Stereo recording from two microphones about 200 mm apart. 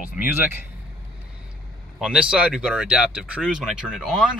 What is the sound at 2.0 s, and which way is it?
Speech, 5° right (ahead or behind).